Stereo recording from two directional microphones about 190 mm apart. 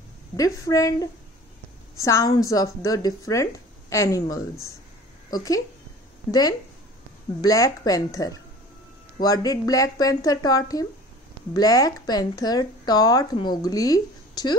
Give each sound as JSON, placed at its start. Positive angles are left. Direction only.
{"t": 0.4, "sound": "a woman's voice", "side_deg": 20}
{"t": 2.0, "sound": "a woman's voice", "side_deg": 15}
{"t": 7.4, "sound": "speech", "side_deg": 20}